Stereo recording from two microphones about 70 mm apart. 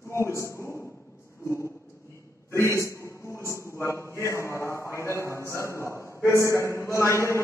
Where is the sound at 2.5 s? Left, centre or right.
Left.